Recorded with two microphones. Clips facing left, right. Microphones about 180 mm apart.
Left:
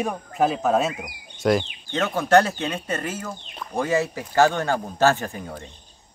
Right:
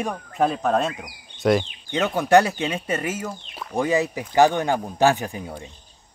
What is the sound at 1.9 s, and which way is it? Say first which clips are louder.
Speech: right 1 dB; 15° right (ahead or behind).